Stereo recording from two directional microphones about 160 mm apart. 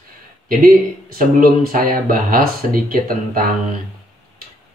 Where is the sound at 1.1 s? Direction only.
60° right (ahead or behind).